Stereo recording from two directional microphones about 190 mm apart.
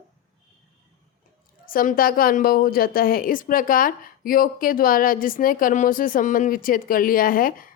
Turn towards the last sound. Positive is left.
turn(degrees=50)  # may be behind; listen again after turning